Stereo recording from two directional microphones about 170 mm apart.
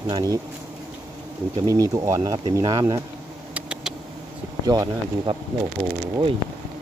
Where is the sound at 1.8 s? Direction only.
20° right (ahead or behind).